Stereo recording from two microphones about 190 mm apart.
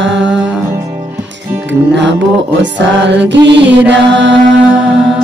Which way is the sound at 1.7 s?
70° right (ahead or behind).